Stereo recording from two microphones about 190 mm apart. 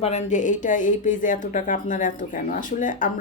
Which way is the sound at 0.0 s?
35° left (ahead or behind).